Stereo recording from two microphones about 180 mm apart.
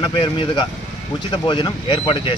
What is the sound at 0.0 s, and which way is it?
Speech, 25° left (ahead or behind).